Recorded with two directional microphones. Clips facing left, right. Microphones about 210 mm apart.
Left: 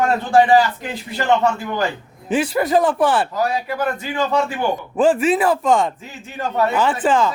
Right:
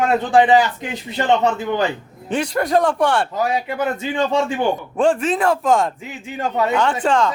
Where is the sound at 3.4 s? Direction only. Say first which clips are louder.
Right 1 dB; 20° right (ahead or behind).